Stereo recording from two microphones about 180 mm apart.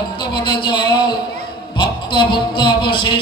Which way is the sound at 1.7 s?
25° left (ahead or behind).